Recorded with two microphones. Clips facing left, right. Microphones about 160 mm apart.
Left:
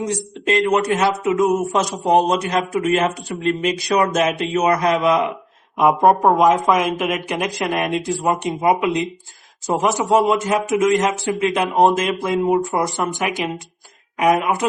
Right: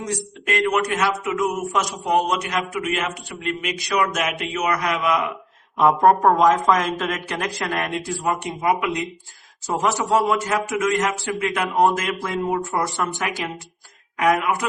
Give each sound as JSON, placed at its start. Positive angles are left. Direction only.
{"t": 0.0, "sound": "speech", "side_deg": 25}
{"t": 5.7, "sound": "speech", "side_deg": 15}